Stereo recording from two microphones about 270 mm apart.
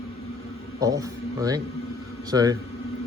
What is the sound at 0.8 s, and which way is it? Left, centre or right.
A man's voice, centre.